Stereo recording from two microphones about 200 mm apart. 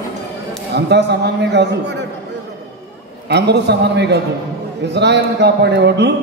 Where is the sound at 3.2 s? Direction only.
55° right (ahead or behind).